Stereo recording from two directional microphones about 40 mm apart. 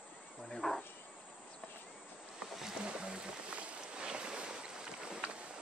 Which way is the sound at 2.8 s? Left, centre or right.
Right.